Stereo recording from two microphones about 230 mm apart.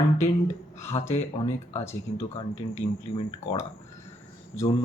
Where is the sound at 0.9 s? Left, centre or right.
Left.